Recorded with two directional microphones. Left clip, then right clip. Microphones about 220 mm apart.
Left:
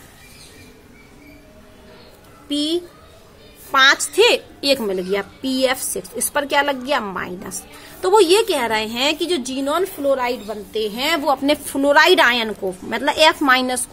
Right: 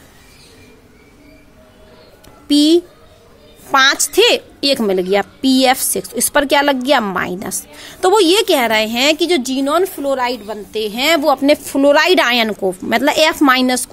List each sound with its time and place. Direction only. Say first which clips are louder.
2.4 s a woman's voice: right 10 dB; 45° right (ahead or behind)